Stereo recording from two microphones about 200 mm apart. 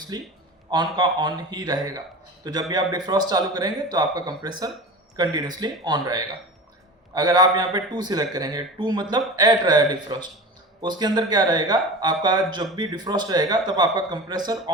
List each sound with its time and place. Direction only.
0.1 s a man's voice: 20° right (ahead or behind)